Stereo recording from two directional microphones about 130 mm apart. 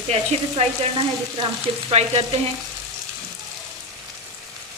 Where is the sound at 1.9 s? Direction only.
55° right (ahead or behind).